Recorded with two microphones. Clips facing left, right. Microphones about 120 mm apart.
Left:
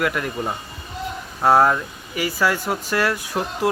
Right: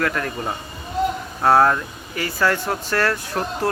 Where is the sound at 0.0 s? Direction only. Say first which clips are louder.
Even; 15° left (ahead or behind).